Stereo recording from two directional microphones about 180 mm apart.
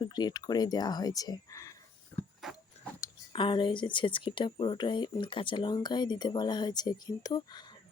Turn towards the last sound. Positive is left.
turn(degrees=25)  # may be behind; listen again after turning